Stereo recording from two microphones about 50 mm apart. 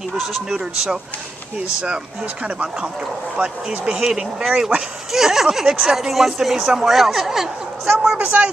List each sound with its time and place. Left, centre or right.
3.3 s speech: centre
8.0 s a woman's voice: right